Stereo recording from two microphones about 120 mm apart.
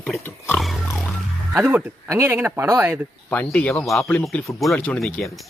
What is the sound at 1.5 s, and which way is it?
Speech, 20° right (ahead or behind).